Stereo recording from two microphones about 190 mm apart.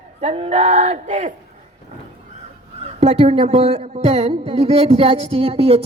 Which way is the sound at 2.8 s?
35° right (ahead or behind).